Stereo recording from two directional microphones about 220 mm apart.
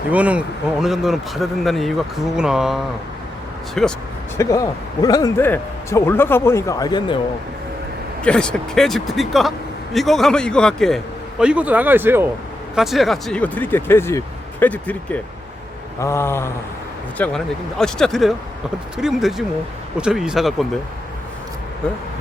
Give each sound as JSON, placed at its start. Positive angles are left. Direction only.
{"t": 0.1, "sound": "a man's voice", "side_deg": -5}
{"t": 3.8, "sound": "a man's voice", "side_deg": 5}
{"t": 4.4, "sound": "speech", "side_deg": 15}
{"t": 8.2, "sound": "a man's voice", "side_deg": 5}